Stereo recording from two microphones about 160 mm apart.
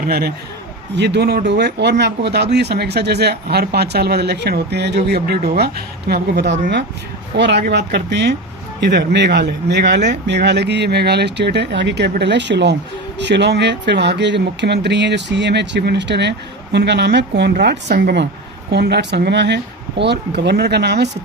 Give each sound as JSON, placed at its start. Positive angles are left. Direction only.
{"t": 0.0, "sound": "a man's voice", "side_deg": -80}
{"t": 0.9, "sound": "speech", "side_deg": -90}